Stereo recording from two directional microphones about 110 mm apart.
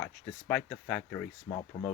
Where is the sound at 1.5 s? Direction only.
30° left (ahead or behind).